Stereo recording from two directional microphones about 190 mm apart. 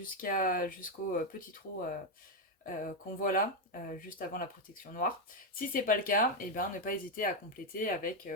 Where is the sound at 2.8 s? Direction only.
45° left (ahead or behind).